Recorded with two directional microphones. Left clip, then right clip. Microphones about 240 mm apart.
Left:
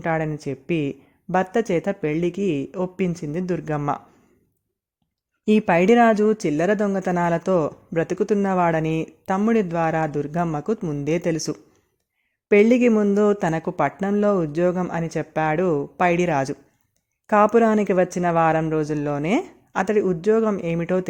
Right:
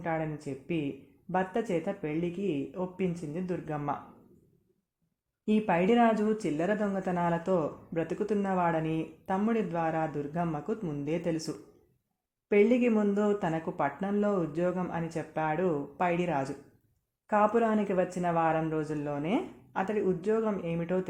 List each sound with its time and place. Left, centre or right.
0.0 s speech: left
5.5 s speech: left